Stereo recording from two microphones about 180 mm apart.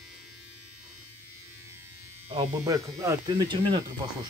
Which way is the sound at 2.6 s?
20° right (ahead or behind).